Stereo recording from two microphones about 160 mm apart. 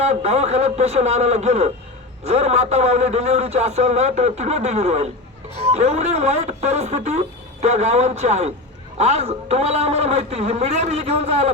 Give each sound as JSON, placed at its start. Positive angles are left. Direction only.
{"t": 0.0, "sound": "speech", "side_deg": -45}